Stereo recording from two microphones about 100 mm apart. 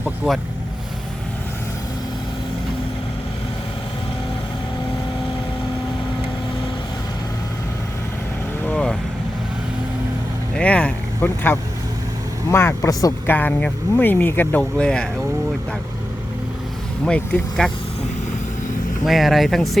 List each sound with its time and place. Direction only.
0.2 s speech: centre (ahead or behind)
8.6 s vehicle: 5° left (ahead or behind)
10.6 s vehicle: 15° left (ahead or behind)
12.5 s a woman's voice: 25° left (ahead or behind)
13.2 s speech: 15° left (ahead or behind)
14.6 s speech: 10° left (ahead or behind)
17.1 s speech: 10° left (ahead or behind)
19.0 s speech: centre (ahead or behind)